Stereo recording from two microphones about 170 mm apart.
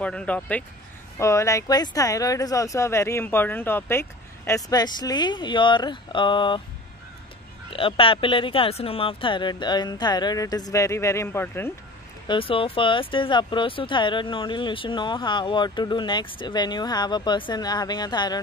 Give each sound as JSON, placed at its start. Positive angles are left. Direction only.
{"t": 0.0, "sound": "speech", "side_deg": 5}
{"t": 7.7, "sound": "speech", "side_deg": 30}
{"t": 12.3, "sound": "speech", "side_deg": 30}